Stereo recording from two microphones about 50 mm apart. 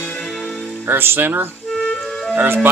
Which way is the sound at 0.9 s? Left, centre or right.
Right.